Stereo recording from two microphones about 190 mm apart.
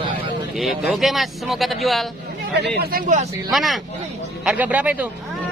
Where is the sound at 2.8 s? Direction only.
50° right (ahead or behind).